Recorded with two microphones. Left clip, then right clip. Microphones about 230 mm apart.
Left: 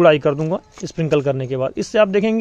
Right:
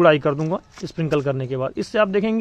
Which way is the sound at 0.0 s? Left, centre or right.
Centre.